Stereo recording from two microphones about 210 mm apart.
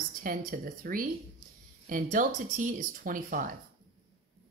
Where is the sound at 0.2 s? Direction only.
40° right (ahead or behind).